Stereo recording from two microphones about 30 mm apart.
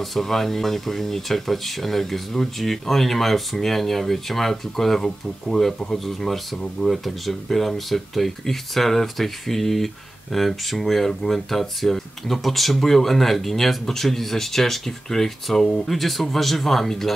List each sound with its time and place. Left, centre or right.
0.0 s speech: centre
6.8 s speech: left
7.4 s speech: centre
15.9 s speech: centre